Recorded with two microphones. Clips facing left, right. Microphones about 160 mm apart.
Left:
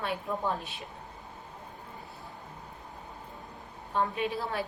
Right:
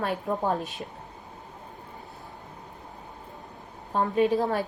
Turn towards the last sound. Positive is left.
turn(degrees=-45)  # may be behind; listen again after turning